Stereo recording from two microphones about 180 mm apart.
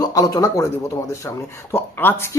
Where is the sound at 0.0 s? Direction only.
20° left (ahead or behind).